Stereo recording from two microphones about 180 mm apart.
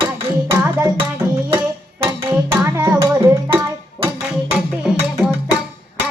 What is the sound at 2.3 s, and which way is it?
Music, 10° right (ahead or behind).